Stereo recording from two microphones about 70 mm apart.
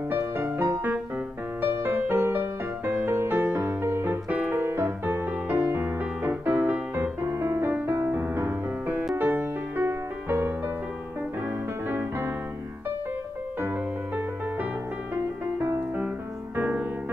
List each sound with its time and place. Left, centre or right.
0.1 s music: right
7.0 s music: right
15.1 s music: right